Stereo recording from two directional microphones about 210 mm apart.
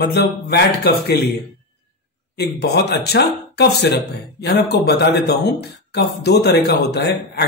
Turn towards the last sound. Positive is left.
turn(degrees=50)  # may be behind; listen again after turning